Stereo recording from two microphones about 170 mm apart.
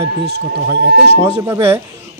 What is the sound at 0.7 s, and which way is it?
Speech, 85° right.